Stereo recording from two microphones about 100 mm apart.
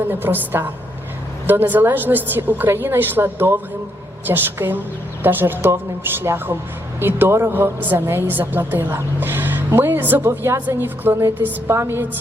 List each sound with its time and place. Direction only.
0.1 s a woman's voice: 20° right (ahead or behind)